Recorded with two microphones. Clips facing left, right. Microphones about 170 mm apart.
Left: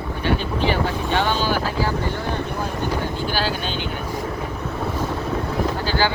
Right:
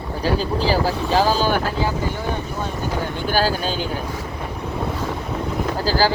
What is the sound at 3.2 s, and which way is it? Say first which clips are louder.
Speech: right 4 dB; 40° right (ahead or behind).